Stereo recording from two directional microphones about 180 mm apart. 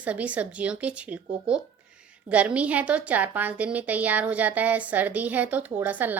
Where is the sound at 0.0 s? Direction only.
10° right (ahead or behind).